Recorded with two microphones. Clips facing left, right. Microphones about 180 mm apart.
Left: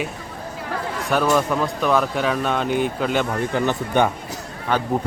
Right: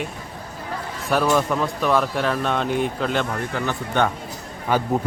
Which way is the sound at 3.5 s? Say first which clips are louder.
Left 5 dB; 15° left (ahead or behind).